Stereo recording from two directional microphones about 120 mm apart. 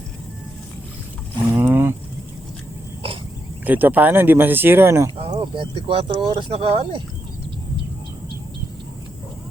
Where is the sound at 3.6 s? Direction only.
15° right (ahead or behind).